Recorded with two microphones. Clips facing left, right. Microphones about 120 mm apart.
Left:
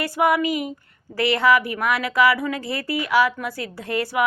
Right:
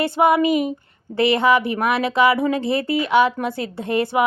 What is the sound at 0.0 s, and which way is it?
A woman's voice, 25° right (ahead or behind).